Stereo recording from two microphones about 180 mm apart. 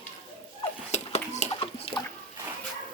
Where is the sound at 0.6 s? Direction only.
35° left (ahead or behind).